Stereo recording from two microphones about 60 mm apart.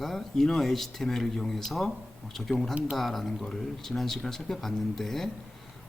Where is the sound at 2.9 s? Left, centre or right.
Centre.